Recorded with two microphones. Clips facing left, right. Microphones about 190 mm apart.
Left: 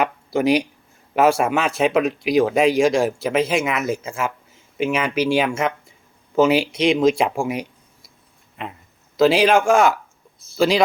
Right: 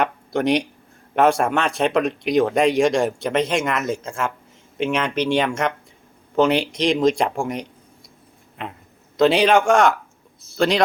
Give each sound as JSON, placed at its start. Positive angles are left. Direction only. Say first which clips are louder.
{"t": 0.0, "sound": "a man's voice", "louder": "left 1 dB", "side_deg": 5}